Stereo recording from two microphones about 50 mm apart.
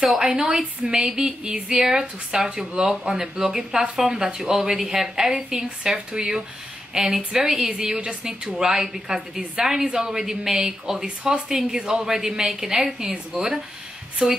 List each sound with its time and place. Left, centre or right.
0.2 s speech: centre
13.1 s speech: centre